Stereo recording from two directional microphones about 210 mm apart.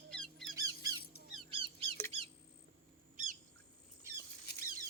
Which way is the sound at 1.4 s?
25° right (ahead or behind).